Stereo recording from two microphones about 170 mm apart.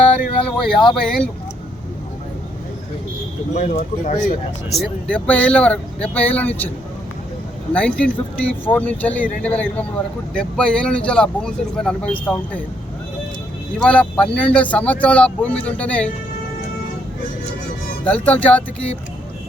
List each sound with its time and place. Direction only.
0.0 s speech: 5° left (ahead or behind)
3.5 s speech: 40° left (ahead or behind)
4.7 s speech: 5° left (ahead or behind)
7.7 s speech: 5° left (ahead or behind)
13.7 s speech: 5° left (ahead or behind)
18.0 s speech: 10° left (ahead or behind)